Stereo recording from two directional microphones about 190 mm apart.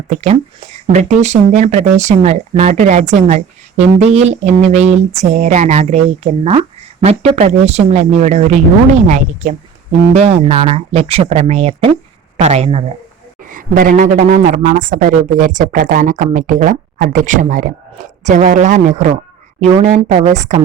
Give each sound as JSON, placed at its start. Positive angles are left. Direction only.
{"t": 0.9, "sound": "speech", "side_deg": -35}
{"t": 13.4, "sound": "a man's voice", "side_deg": -45}